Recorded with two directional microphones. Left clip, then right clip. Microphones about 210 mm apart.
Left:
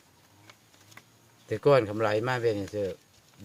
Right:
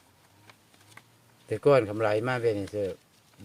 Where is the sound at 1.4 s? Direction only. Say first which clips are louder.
Even; 5° right (ahead or behind).